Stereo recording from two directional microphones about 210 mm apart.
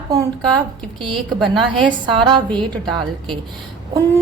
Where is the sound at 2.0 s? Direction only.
20° right (ahead or behind).